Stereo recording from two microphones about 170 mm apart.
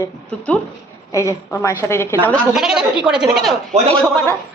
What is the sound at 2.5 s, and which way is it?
Speech, 5° right (ahead or behind).